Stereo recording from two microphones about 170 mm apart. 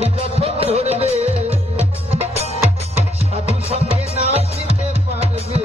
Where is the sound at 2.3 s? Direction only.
40° left (ahead or behind).